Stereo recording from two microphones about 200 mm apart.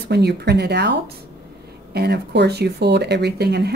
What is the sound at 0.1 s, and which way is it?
Speech, 55° right (ahead or behind).